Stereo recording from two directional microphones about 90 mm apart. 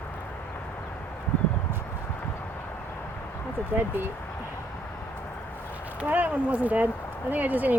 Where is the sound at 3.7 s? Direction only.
25° right (ahead or behind).